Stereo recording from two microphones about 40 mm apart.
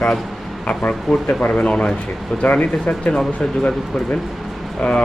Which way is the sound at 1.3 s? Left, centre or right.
Left.